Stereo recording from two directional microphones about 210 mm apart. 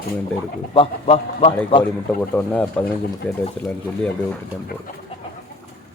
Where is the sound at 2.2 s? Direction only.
5° left (ahead or behind).